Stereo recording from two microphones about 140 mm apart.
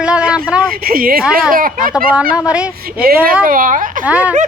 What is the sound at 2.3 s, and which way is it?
Speech, 10° right (ahead or behind).